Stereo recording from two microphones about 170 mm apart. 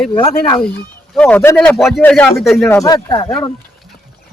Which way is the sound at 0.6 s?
5° left (ahead or behind).